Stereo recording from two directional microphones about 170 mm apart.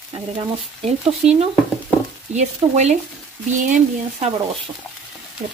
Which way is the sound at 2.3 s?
45° right (ahead or behind).